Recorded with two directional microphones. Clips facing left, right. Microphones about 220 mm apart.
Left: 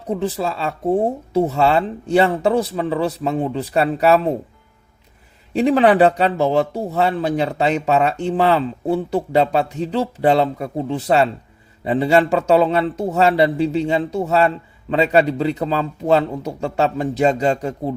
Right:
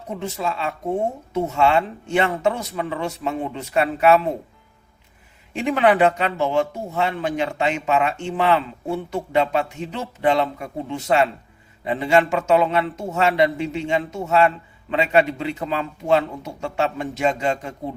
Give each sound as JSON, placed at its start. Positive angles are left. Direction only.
{"t": 0.1, "sound": "a man's voice", "side_deg": 35}
{"t": 5.5, "sound": "a man's voice", "side_deg": 35}